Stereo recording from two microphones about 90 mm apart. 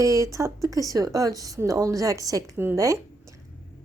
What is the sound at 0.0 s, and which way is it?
Speech, 35° right (ahead or behind).